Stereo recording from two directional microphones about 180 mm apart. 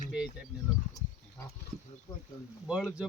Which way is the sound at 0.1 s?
5° right (ahead or behind).